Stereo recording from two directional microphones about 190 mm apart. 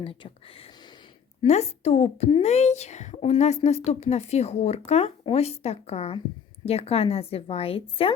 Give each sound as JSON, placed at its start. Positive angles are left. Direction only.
{"t": 0.0, "sound": "speech", "side_deg": 30}
{"t": 1.4, "sound": "speech", "side_deg": 35}